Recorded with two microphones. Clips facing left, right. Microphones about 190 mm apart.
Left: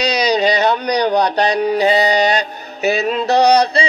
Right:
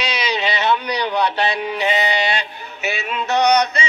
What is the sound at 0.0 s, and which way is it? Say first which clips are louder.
Speech: left 7 dB; 40° left (ahead or behind).